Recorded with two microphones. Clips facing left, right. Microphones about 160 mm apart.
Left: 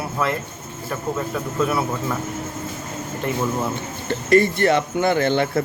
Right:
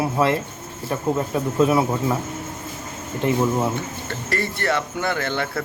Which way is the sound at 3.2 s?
20° right (ahead or behind).